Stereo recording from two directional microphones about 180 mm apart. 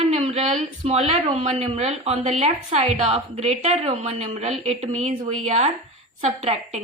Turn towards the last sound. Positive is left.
turn(degrees=-35)  # may be behind; listen again after turning